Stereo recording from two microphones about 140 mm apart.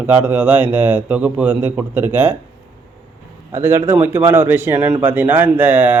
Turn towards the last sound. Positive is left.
turn(degrees=-15)  # may be behind; listen again after turning